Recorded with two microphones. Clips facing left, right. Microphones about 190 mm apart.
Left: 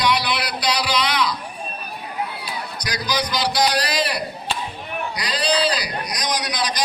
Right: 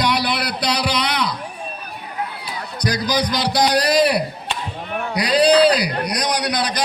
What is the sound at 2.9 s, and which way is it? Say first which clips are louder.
Heart sounds: right 5 dB; 50° right (ahead or behind).